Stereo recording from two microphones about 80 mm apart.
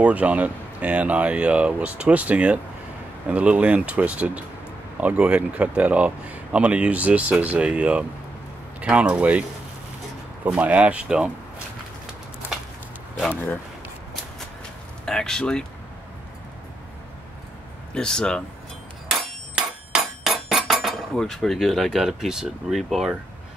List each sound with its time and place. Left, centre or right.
0.0 s speech: centre
10.4 s speech: centre
15.0 s speech: centre
17.9 s speech: centre
19.0 s hammer: centre
20.3 s cutlery: centre
22.8 s speech: centre